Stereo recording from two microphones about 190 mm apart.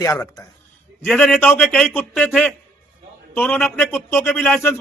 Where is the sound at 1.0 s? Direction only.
5° left (ahead or behind).